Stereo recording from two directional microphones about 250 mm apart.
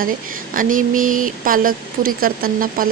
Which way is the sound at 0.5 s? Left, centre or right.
Right.